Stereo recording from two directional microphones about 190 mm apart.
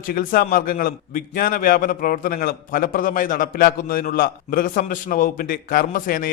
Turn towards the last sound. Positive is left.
turn(degrees=50)  # may be behind; listen again after turning